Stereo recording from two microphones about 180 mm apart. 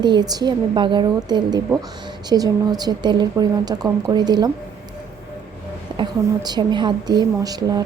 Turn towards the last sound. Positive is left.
turn(degrees=-20)  # may be behind; listen again after turning